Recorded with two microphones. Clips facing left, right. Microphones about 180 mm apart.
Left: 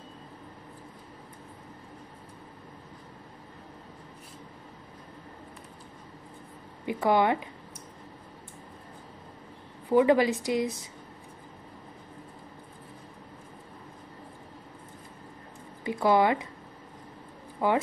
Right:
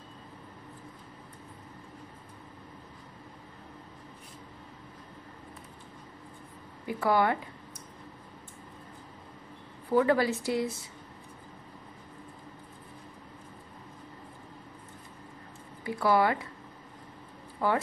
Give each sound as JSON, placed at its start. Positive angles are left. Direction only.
{"t": 6.9, "sound": "speech", "side_deg": 20}
{"t": 9.8, "sound": "a woman's voice", "side_deg": 15}
{"t": 15.8, "sound": "speech", "side_deg": 20}
{"t": 17.6, "sound": "speech", "side_deg": 20}